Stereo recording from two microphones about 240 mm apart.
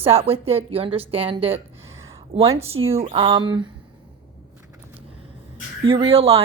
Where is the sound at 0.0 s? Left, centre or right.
Right.